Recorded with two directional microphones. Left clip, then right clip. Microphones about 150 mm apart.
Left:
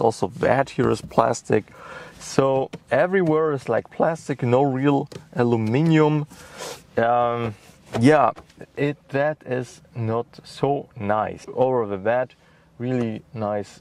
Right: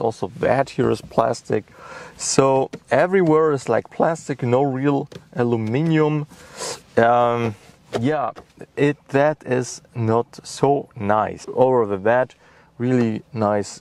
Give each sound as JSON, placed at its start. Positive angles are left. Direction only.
{"t": 0.4, "sound": "speech", "side_deg": -10}
{"t": 2.3, "sound": "speech", "side_deg": -25}
{"t": 4.3, "sound": "speech", "side_deg": 0}
{"t": 6.5, "sound": "speech", "side_deg": -20}
{"t": 8.0, "sound": "speech", "side_deg": 25}
{"t": 8.7, "sound": "speech", "side_deg": -35}
{"t": 10.6, "sound": "speech", "side_deg": -30}
{"t": 12.7, "sound": "speech", "side_deg": -55}